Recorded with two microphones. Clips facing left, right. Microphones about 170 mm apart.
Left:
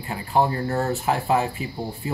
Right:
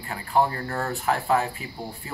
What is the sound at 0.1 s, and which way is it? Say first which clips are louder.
Speech: left 2 dB; 20° left (ahead or behind).